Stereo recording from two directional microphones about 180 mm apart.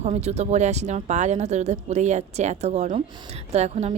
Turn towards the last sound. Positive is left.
turn(degrees=-35)  # may be behind; listen again after turning